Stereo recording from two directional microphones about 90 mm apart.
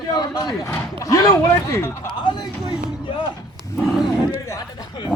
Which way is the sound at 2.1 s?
60° left (ahead or behind).